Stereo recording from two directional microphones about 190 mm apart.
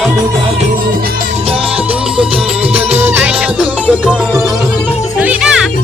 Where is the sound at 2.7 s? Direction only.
35° right (ahead or behind).